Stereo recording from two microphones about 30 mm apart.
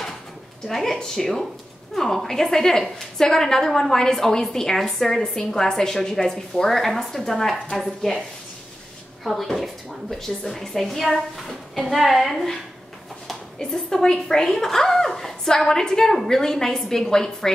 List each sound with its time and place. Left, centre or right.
0.7 s a woman's voice: centre
9.2 s a woman's voice: centre
13.6 s a woman's voice: left; by 14.8 s centre
14.9 s a sound: centre
15.6 s a woman's voice: centre